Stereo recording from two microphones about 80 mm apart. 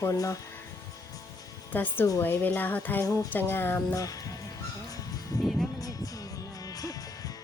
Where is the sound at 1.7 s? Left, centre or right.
Left.